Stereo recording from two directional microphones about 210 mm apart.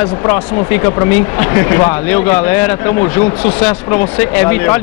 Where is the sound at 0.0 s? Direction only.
10° left (ahead or behind).